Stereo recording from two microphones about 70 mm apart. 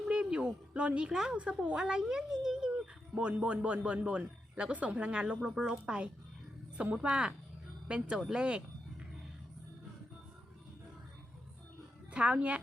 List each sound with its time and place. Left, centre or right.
0.1 s a sound: centre
1.4 s speech: centre
12.1 s speech: centre